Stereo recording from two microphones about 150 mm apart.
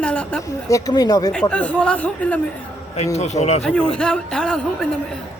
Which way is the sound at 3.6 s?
5° left (ahead or behind).